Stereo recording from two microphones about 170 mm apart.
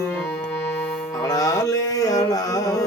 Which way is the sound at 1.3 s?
20° left (ahead or behind).